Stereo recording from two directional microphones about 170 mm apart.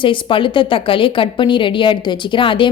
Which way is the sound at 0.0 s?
30° left (ahead or behind).